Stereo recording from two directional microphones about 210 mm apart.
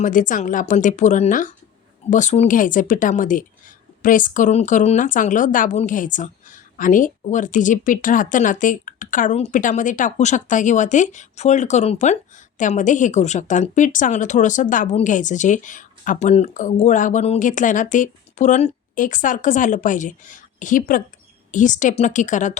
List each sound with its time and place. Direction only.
0.0 s a woman's voice: 40° left (ahead or behind)